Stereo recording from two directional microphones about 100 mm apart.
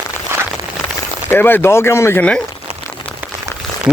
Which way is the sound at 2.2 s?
10° left (ahead or behind).